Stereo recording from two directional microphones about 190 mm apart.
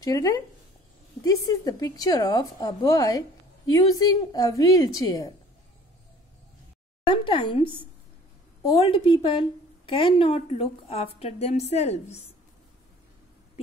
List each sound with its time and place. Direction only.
0.0 s a woman's voice: 20° left (ahead or behind)
7.1 s a woman's voice: 25° left (ahead or behind)